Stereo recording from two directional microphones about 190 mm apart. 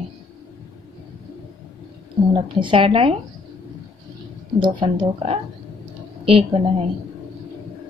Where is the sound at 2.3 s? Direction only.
25° right (ahead or behind).